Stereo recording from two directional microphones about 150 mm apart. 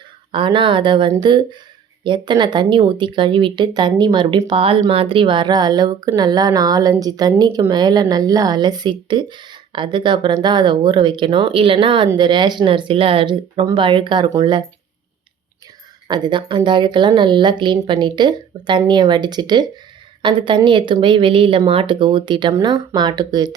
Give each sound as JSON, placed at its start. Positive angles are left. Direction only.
{"t": 0.3, "sound": "speech", "side_deg": -35}
{"t": 16.0, "sound": "speech", "side_deg": -30}